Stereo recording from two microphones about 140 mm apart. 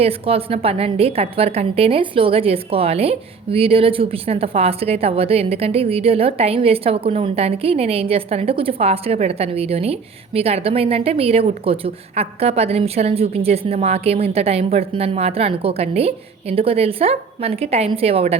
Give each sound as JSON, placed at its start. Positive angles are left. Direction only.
{"t": 0.0, "sound": "a woman's voice", "side_deg": -45}